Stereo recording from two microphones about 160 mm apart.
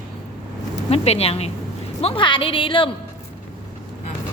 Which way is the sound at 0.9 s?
40° left (ahead or behind).